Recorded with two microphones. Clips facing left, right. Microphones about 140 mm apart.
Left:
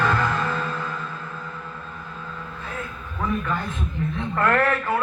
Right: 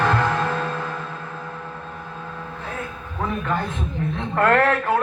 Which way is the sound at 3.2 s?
45° right (ahead or behind).